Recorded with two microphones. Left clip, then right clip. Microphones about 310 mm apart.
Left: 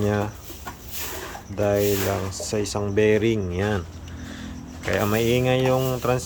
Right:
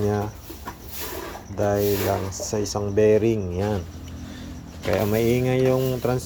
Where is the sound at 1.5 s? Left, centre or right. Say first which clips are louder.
Left 1 dB; centre.